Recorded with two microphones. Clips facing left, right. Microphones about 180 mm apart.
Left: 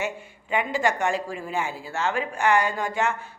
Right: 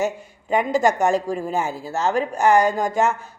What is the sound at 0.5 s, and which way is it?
Speech, 40° right (ahead or behind).